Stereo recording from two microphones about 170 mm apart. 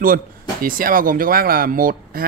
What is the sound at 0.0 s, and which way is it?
Speech, 55° right (ahead or behind).